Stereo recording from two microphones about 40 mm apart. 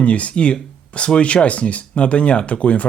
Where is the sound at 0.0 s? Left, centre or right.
Left.